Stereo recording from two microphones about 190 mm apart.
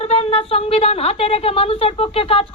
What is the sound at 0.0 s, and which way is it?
A woman's voice, 30° left (ahead or behind).